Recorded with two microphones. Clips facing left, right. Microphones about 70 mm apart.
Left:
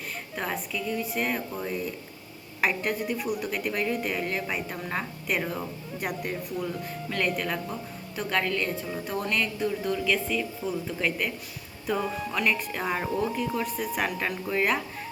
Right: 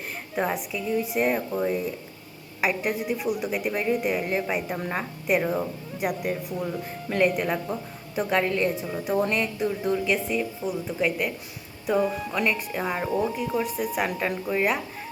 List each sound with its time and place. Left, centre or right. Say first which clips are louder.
0.3 s speech: right 5 dB; centre
2.6 s a woman's voice: right 1 dB; centre